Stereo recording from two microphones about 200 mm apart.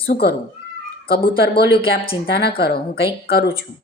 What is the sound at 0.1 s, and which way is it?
Speech, 50° left (ahead or behind).